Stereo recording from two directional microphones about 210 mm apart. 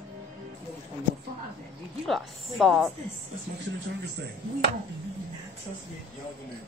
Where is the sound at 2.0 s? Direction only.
Centre (ahead or behind).